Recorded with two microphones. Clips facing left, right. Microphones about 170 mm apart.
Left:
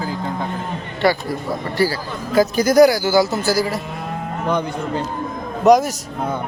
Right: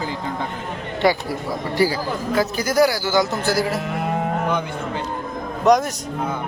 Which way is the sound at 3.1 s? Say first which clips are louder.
Left 3 dB; 5° left (ahead or behind).